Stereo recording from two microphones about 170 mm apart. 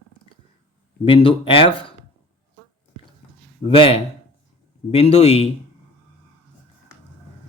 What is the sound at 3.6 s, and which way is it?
Speech, 35° left (ahead or behind).